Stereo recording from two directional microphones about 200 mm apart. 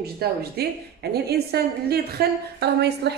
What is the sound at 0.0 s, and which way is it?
A woman's voice, 50° right (ahead or behind).